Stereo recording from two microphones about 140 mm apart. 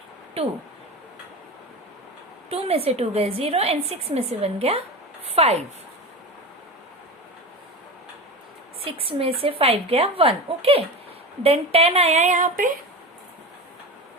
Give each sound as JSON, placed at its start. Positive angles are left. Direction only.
{"t": 2.5, "sound": "a woman's voice", "side_deg": -45}
{"t": 8.8, "sound": "a woman's voice", "side_deg": -40}